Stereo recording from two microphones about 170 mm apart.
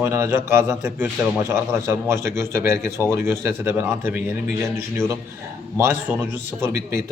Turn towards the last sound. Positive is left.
turn(degrees=-15)  # may be behind; listen again after turning